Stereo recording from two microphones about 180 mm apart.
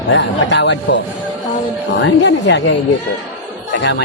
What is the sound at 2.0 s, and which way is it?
Speech, 85° left.